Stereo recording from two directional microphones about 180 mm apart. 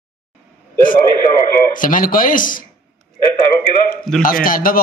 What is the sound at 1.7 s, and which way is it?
Speech, 50° left (ahead or behind).